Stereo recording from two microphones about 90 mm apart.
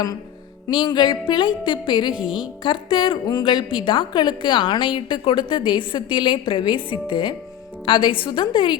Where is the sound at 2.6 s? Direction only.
70° left (ahead or behind).